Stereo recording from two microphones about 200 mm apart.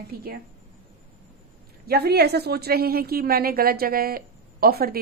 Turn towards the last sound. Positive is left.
turn(degrees=-50)  # may be behind; listen again after turning